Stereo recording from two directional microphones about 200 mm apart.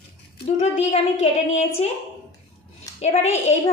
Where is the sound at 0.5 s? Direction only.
35° left (ahead or behind).